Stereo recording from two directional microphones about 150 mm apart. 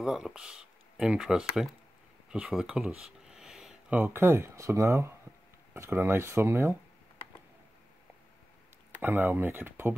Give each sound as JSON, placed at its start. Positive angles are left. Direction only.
{"t": 0.0, "sound": "speech", "side_deg": -5}
{"t": 9.0, "sound": "speech", "side_deg": -15}